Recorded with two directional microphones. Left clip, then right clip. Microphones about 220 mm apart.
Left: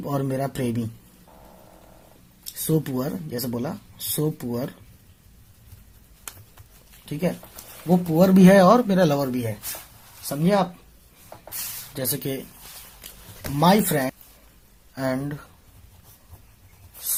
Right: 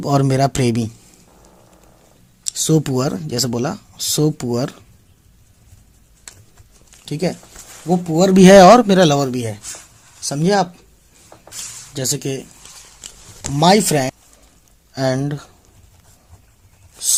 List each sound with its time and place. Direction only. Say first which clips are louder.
0.0 s speech: right 10 dB; 45° right (ahead or behind)
2.4 s speech: right 8 dB; 45° right (ahead or behind)
7.0 s speech: right 5 dB; 45° right (ahead or behind)
7.9 s speech: right 4 dB; 30° right (ahead or behind); by 10.7 s 45° right (ahead or behind)
11.9 s speech: right 6 dB; 35° right (ahead or behind)